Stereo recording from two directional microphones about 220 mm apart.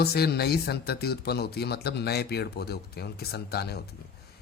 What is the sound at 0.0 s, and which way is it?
Speech, 45° left (ahead or behind).